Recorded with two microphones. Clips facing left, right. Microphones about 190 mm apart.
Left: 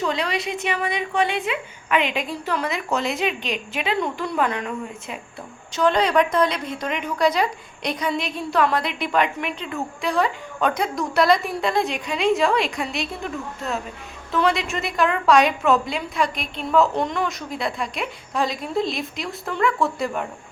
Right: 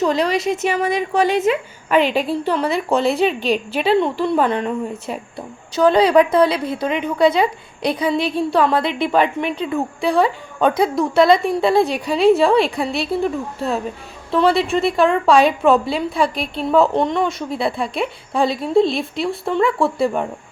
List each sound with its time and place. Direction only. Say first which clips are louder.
0.0 s a woman's voice: right 7 dB; 40° right (ahead or behind)
14.3 s a woman's voice: right 6 dB; 30° right (ahead or behind)